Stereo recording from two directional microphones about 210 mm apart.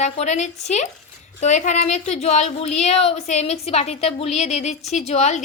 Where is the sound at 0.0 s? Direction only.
35° left (ahead or behind).